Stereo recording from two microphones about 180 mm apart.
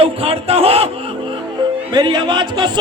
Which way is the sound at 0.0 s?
30° right (ahead or behind).